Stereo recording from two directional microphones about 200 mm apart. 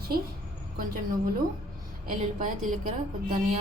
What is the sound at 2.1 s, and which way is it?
Speech, 40° right (ahead or behind).